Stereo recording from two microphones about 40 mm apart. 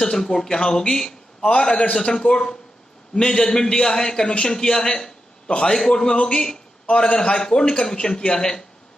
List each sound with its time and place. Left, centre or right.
0.0 s a man's voice: centre